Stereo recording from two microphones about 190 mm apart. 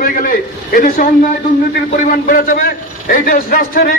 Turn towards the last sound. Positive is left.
turn(degrees=45)  # may be behind; listen again after turning